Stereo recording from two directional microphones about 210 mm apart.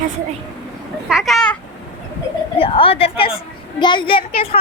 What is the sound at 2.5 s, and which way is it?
A child's voice, 25° left (ahead or behind).